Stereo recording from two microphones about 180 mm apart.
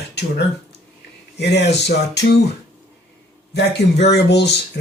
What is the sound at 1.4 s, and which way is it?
Speech, 70° left (ahead or behind).